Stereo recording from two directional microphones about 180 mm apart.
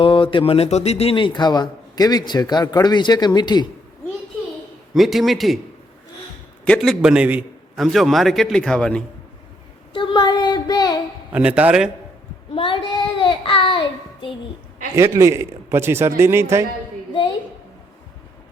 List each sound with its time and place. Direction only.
0.0 s a man's voice: 30° left (ahead or behind)
4.9 s a man's voice: centre (ahead or behind)
6.7 s a man's voice: centre (ahead or behind)
9.9 s child singing: 25° left (ahead or behind)
11.3 s a man's voice: 5° right (ahead or behind)
12.5 s child singing: 30° left (ahead or behind)
14.9 s a man's voice: 15° right (ahead or behind)